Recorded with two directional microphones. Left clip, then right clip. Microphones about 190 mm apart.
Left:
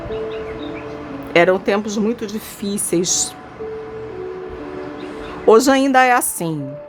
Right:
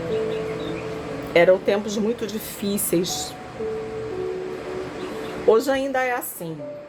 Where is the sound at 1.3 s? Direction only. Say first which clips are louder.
Left 2 dB; 20° left (ahead or behind).